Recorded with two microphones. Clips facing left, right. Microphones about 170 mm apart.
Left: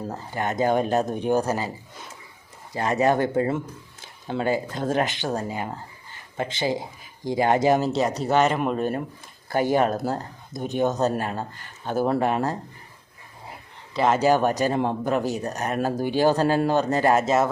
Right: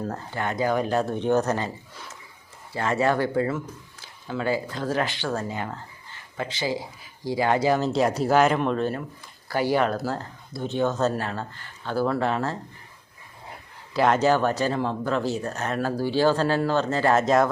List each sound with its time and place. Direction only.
0.0 s speech: 10° left (ahead or behind)
2.7 s speech: 15° left (ahead or behind)
4.0 s a sound: 25° left (ahead or behind)
4.7 s speech: 20° left (ahead or behind)
7.9 s speech: centre (ahead or behind)
9.9 s speech: 20° left (ahead or behind)
13.5 s a sound: centre (ahead or behind)
14.2 s speech: 15° left (ahead or behind)